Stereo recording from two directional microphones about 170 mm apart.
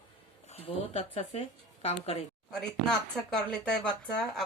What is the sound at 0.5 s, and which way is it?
A woman's voice, 35° left (ahead or behind).